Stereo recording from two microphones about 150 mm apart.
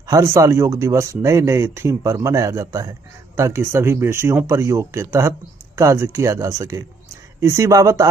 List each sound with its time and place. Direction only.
0.0 s speech: 20° right (ahead or behind)